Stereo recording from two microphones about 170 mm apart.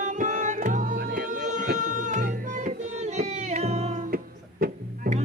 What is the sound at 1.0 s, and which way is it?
Music, 60° right (ahead or behind).